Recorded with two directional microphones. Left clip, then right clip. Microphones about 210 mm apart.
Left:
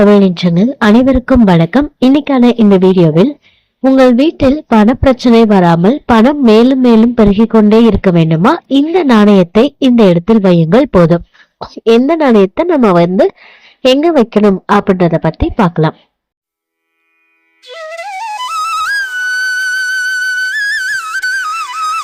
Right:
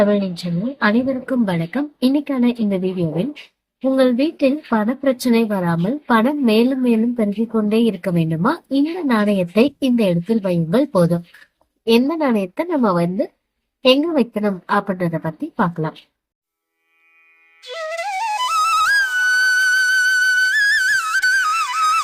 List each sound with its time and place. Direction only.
0.1 s a woman's voice: 40° left (ahead or behind)
3.9 s a woman's voice: 35° left (ahead or behind)
17.6 s flute: centre (ahead or behind)